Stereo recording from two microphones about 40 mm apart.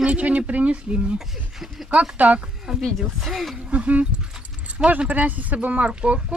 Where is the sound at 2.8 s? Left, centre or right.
Centre.